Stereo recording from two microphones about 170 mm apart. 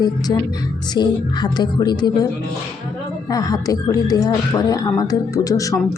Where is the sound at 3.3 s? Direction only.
20° left (ahead or behind).